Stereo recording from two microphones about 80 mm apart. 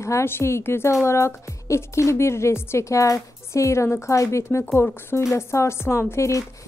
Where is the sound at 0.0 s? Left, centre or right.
Left.